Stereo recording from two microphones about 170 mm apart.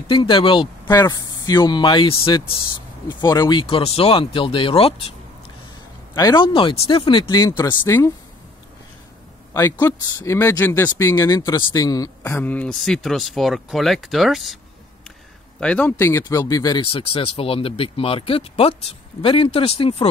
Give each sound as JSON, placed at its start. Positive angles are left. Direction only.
{"t": 0.1, "sound": "speech", "side_deg": 30}
{"t": 6.1, "sound": "speech", "side_deg": 25}
{"t": 9.5, "sound": "speech", "side_deg": 20}
{"t": 15.6, "sound": "speech", "side_deg": 10}